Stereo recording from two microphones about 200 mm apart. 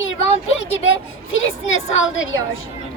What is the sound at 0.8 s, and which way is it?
A woman's voice, 75° left (ahead or behind).